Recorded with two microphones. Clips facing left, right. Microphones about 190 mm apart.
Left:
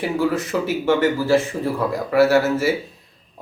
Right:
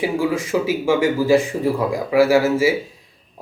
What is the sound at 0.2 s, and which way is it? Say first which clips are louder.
Speech: right 1 dB; 10° right (ahead or behind).